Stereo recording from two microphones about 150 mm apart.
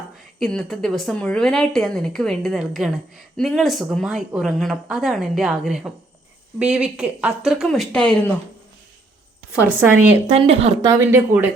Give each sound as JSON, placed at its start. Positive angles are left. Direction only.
{"t": 0.3, "sound": "speech", "side_deg": 5}
{"t": 9.6, "sound": "a woman's voice", "side_deg": -15}
{"t": 10.2, "sound": "speech", "side_deg": -45}
{"t": 10.8, "sound": "speech", "side_deg": -20}